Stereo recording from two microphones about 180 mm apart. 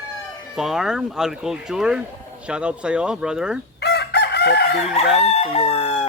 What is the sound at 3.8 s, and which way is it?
Chicken, 65° left (ahead or behind).